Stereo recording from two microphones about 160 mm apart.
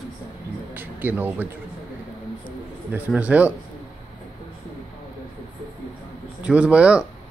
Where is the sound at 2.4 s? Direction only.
10° right (ahead or behind).